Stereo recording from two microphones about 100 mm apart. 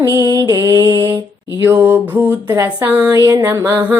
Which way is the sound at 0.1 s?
35° right (ahead or behind).